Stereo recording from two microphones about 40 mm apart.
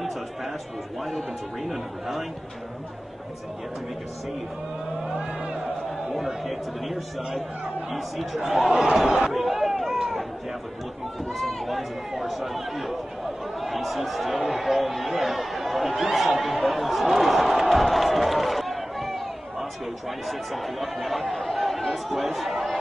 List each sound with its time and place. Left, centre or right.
1.0 s a man's voice: centre
5.1 s speech: right
6.1 s a man's voice: centre
8.9 s a sound: centre
11.3 s run: centre
13.6 s chatter: centre
20.2 s a man's voice: centre